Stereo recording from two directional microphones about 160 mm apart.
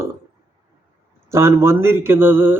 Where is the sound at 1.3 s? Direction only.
15° right (ahead or behind).